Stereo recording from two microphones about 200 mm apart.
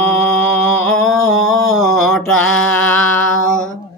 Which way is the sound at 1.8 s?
Centre (ahead or behind).